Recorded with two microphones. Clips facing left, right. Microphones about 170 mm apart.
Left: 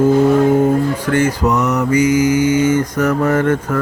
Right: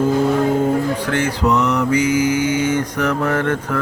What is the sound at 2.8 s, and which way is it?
Mantra, 10° left (ahead or behind).